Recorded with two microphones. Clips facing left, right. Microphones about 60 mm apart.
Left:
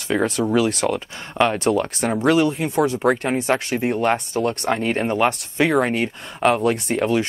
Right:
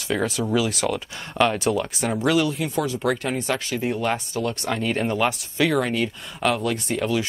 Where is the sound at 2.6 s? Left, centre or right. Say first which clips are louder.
Left 5 dB; left.